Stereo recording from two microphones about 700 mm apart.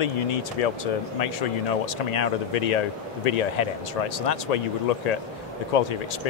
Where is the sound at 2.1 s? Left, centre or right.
Left.